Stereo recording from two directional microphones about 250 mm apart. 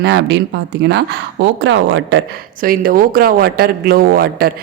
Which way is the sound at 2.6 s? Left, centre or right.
Right.